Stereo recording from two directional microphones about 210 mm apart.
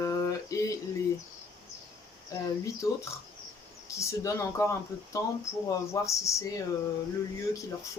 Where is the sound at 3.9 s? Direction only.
15° left (ahead or behind).